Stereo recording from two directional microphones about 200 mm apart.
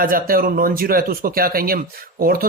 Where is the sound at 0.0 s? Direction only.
45° right (ahead or behind).